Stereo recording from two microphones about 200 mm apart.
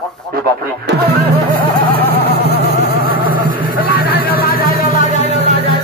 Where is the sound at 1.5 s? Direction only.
50° right (ahead or behind).